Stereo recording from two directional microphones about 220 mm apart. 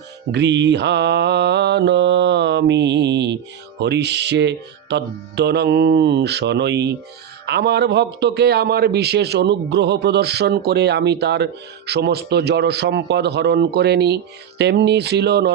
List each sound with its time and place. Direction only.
0.3 s a man's voice: 50° right (ahead or behind)